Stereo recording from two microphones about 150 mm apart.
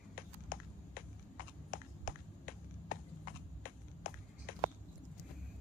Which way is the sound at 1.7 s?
70° left (ahead or behind).